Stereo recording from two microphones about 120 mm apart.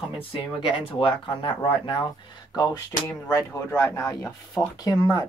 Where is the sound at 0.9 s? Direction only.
45° left (ahead or behind).